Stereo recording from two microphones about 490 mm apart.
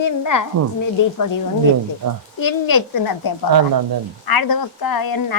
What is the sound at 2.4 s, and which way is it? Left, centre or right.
Speech, left.